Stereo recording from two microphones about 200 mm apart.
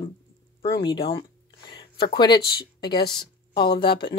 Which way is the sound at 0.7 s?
25° left (ahead or behind).